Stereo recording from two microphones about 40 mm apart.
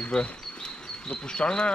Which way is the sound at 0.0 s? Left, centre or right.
Left.